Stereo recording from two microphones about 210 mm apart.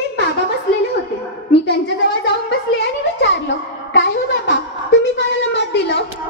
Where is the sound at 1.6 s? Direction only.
55° left (ahead or behind).